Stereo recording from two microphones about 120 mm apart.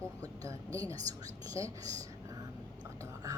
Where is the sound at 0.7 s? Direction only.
30° right (ahead or behind).